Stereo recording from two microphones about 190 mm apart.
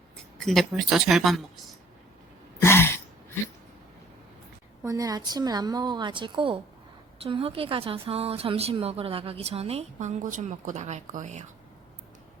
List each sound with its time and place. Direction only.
0.3 s speech: centre (ahead or behind)
2.6 s a sound: 15° left (ahead or behind)
4.8 s a woman's voice: 15° right (ahead or behind); by 11.4 s 40° right (ahead or behind)